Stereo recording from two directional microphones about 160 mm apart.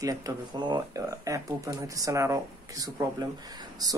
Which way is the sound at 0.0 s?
20° right (ahead or behind).